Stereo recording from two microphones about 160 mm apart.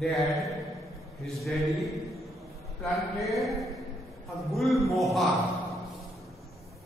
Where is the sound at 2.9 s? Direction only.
Centre (ahead or behind).